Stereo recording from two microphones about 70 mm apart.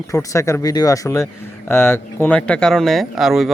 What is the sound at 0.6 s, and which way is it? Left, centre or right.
Speech, left.